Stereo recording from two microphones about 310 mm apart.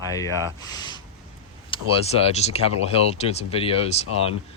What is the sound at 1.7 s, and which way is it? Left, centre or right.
A man's voice, centre.